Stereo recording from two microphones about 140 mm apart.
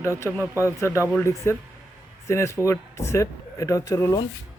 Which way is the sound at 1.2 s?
20° left (ahead or behind).